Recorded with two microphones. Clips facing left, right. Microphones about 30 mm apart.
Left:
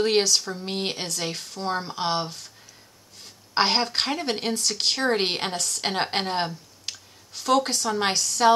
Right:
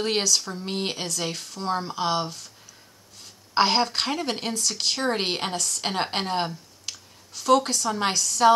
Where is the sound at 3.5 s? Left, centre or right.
Left.